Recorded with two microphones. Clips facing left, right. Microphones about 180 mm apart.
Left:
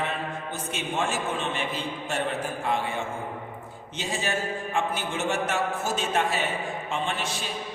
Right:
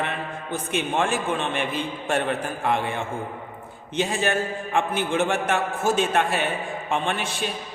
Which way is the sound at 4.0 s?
60° right (ahead or behind).